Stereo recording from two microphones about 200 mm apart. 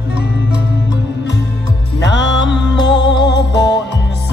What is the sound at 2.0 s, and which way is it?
Music, 60° left (ahead or behind).